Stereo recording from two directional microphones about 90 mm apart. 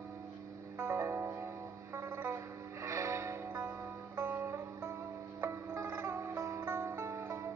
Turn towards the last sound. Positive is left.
turn(degrees=-30)  # may be behind; listen again after turning